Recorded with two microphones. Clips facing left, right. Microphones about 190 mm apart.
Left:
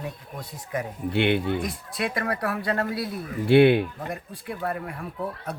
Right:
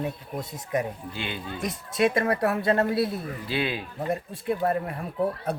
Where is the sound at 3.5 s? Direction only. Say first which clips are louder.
Left 13 dB; 65° left (ahead or behind).